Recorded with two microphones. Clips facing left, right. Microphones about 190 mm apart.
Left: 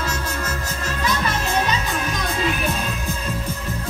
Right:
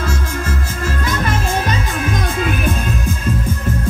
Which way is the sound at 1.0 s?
50° right (ahead or behind).